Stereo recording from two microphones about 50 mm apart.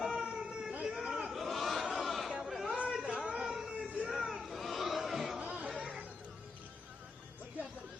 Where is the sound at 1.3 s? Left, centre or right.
Centre.